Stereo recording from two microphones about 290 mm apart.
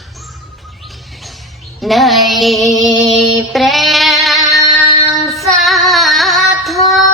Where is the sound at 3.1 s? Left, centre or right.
Centre.